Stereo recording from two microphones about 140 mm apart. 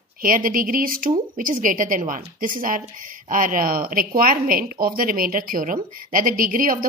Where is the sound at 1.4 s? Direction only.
70° right (ahead or behind).